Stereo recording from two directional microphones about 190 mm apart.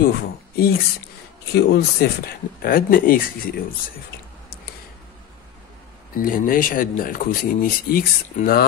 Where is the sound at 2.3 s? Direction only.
50° left (ahead or behind).